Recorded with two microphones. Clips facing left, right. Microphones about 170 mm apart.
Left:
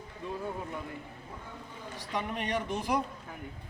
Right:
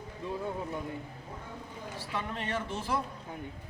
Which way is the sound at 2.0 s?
15° left (ahead or behind).